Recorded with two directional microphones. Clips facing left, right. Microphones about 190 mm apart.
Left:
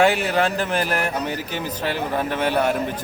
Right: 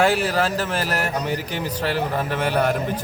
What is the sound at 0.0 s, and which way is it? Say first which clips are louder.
A man's voice: left 1 dB; 5° right (ahead or behind).